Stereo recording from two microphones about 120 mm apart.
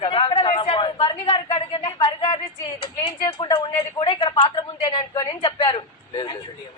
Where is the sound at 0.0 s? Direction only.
45° left (ahead or behind).